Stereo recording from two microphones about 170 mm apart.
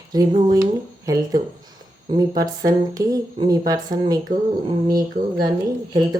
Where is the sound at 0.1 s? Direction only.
20° right (ahead or behind).